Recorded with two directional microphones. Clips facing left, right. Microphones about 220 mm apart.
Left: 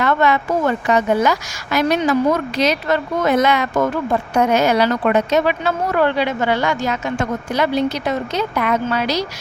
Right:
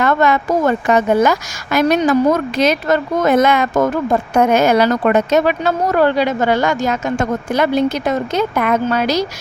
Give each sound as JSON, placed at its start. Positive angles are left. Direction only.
{"t": 0.0, "sound": "a woman's voice", "side_deg": -45}